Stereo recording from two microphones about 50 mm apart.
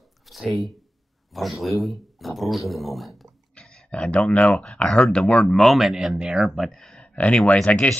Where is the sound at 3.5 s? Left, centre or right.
Left.